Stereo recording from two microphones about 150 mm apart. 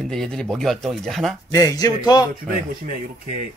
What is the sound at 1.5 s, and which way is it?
Speech, 25° left (ahead or behind).